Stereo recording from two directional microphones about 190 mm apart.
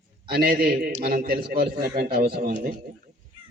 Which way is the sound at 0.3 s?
55° right (ahead or behind).